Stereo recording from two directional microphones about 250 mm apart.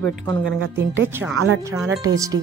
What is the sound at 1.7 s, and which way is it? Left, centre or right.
Speech, centre.